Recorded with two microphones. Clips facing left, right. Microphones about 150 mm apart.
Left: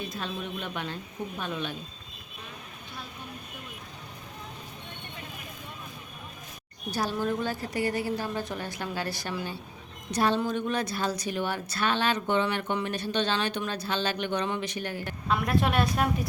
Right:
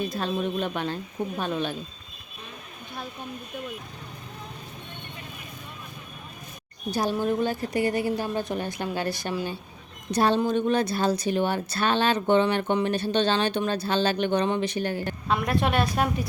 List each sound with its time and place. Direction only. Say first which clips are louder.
0.0 s speech: right 7 dB; 35° right (ahead or behind)
6.9 s a woman's voice: right 4 dB; 15° right (ahead or behind)
15.3 s a woman's voice: right 1 dB; centre (ahead or behind)